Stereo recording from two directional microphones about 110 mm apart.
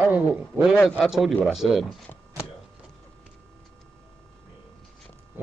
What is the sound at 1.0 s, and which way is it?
Speech, centre (ahead or behind).